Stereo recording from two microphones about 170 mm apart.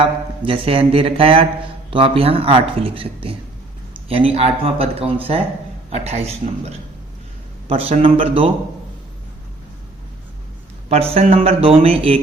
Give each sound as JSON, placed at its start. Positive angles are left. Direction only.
{"t": 0.0, "sound": "speech", "side_deg": -30}
{"t": 10.8, "sound": "speech", "side_deg": -35}